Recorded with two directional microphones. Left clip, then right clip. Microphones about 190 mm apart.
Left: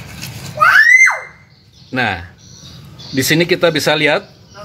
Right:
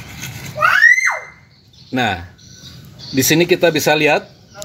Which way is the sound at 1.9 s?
25° right (ahead or behind).